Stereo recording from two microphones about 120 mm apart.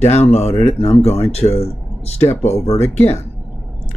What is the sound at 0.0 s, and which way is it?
Speech, 65° left (ahead or behind).